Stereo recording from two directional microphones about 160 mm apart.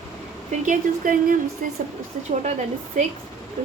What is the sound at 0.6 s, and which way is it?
Speech, 55° right (ahead or behind).